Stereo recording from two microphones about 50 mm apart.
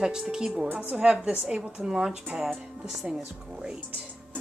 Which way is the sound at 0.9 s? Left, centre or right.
Centre.